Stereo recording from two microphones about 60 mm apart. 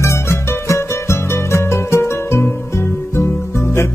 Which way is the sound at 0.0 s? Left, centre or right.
Left.